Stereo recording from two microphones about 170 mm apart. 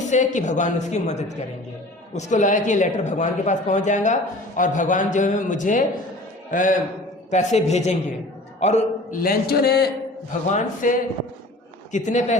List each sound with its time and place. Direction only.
0.1 s a man's voice: 45° left (ahead or behind)
9.2 s a man's voice: 60° left (ahead or behind)
10.5 s a man's voice: 50° left (ahead or behind)